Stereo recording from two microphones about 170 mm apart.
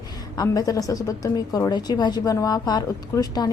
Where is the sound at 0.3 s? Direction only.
20° left (ahead or behind).